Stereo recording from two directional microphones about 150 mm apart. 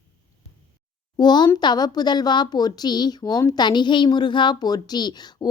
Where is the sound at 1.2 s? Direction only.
30° left (ahead or behind).